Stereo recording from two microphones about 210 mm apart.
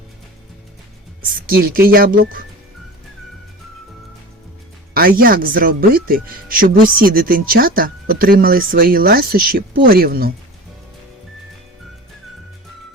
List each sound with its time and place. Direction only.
1.5 s speech: 45° right (ahead or behind)
4.9 s speech: 45° right (ahead or behind)